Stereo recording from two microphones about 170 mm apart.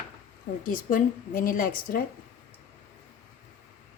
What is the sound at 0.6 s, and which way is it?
A woman's voice, 55° left (ahead or behind).